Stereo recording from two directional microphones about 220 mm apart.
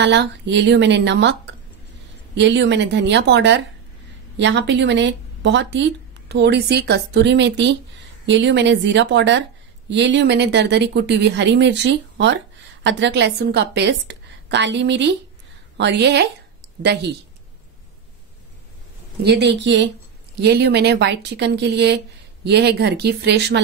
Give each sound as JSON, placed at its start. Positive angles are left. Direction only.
{"t": 0.0, "sound": "speech", "side_deg": -55}
{"t": 19.2, "sound": "speech", "side_deg": -50}